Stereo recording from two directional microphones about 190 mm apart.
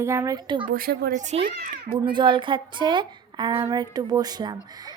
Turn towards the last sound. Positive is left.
turn(degrees=-20)  # may be behind; listen again after turning